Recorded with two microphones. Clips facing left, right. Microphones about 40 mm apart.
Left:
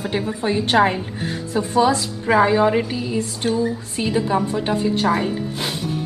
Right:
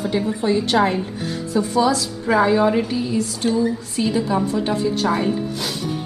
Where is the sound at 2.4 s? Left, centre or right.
Centre.